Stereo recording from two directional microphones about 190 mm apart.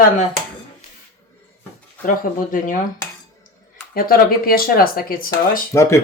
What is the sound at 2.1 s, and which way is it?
Speech, 45° left (ahead or behind).